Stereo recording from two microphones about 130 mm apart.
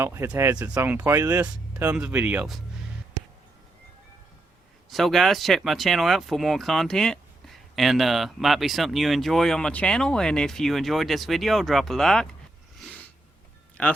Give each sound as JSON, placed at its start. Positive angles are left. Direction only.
{"t": 0.0, "sound": "speech", "side_deg": -20}
{"t": 4.9, "sound": "speech", "side_deg": 0}
{"t": 13.8, "sound": "speech", "side_deg": 10}